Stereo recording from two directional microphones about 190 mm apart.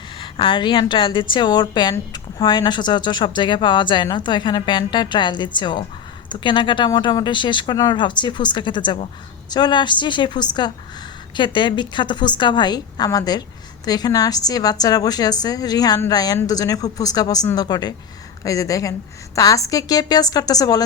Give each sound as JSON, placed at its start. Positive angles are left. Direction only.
{"t": 0.2, "sound": "a woman's voice", "side_deg": 25}